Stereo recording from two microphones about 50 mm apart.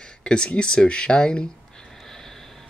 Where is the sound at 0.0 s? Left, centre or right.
Centre.